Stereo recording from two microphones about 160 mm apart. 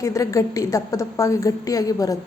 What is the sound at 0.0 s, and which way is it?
A woman's voice, 20° left (ahead or behind).